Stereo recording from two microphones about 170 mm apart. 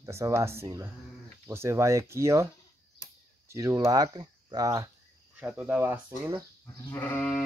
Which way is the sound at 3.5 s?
15° right (ahead or behind).